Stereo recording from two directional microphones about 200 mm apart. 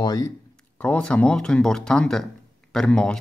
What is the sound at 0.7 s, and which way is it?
Speech, 5° left (ahead or behind).